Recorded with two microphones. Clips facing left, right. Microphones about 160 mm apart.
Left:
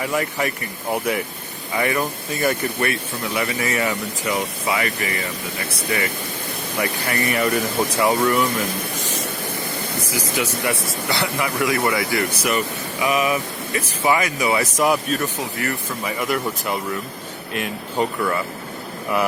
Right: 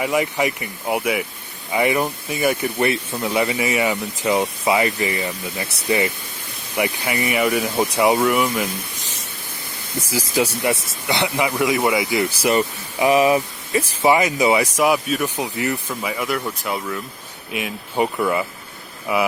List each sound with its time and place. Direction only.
0.0 s speech: 15° right (ahead or behind)
2.9 s speech: 25° right (ahead or behind); by 8.4 s 5° right (ahead or behind)
10.3 s speech: 25° right (ahead or behind)
12.3 s speech: 30° right (ahead or behind)
14.6 s speech: 5° right (ahead or behind)
15.4 s speech: 20° right (ahead or behind)
16.0 s speech: centre (ahead or behind)